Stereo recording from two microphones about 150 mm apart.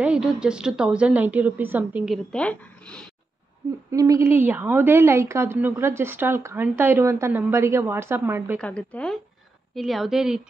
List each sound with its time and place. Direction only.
0.0 s a woman's voice: 5° right (ahead or behind)
2.0 s speech: 5° left (ahead or behind)
3.9 s a woman's voice: 25° right (ahead or behind)
8.5 s a woman's voice: 10° left (ahead or behind)